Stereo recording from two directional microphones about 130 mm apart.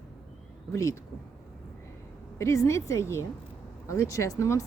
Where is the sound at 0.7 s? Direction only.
25° left (ahead or behind).